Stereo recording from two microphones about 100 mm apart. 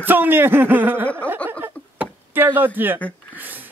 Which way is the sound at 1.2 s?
15° left (ahead or behind).